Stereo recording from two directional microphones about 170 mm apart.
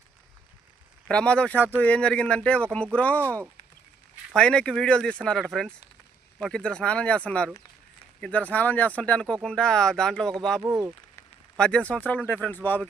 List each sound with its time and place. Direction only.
1.0 s speech: 5° left (ahead or behind)
4.4 s speech: 5° left (ahead or behind)
10.6 s speech: 15° right (ahead or behind)
11.5 s speech: 5° left (ahead or behind)